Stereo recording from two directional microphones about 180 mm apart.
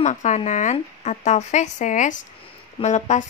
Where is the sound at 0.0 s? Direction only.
40° left (ahead or behind).